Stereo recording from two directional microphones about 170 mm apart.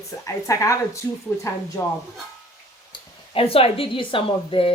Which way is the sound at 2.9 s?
35° left (ahead or behind).